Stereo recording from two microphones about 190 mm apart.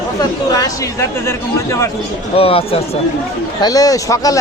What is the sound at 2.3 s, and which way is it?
Speech, 30° left (ahead or behind).